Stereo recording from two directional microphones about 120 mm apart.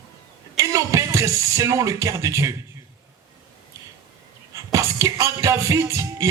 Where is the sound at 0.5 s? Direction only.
25° right (ahead or behind).